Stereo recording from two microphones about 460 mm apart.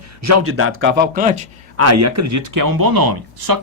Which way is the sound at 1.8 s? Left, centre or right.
Right.